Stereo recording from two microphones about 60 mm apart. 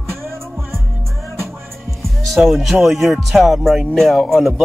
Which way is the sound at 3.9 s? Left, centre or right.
Centre.